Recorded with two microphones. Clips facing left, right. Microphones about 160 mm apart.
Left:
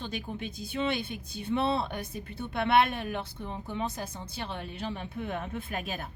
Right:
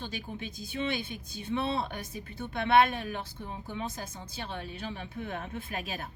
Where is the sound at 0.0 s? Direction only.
55° left (ahead or behind).